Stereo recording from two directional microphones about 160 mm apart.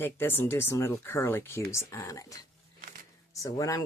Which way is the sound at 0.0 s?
15° left (ahead or behind).